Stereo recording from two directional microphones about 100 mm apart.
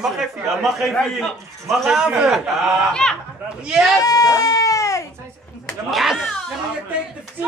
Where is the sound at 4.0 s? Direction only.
35° left (ahead or behind).